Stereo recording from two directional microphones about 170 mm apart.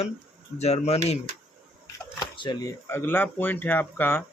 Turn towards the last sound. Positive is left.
turn(degrees=10)  # may be behind; listen again after turning